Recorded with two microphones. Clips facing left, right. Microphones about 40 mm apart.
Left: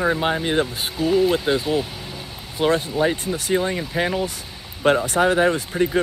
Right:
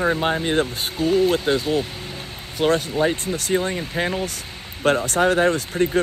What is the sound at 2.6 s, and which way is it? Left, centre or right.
Speech, centre.